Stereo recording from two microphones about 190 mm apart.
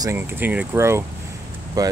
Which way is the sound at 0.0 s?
15° right (ahead or behind).